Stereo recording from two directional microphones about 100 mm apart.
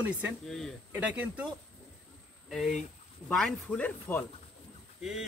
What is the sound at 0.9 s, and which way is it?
Speech, 15° right (ahead or behind).